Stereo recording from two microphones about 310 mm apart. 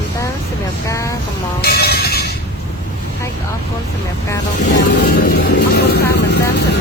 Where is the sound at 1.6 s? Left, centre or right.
Left.